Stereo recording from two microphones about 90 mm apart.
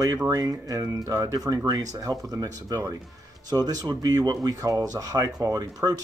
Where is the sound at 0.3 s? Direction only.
40° right (ahead or behind).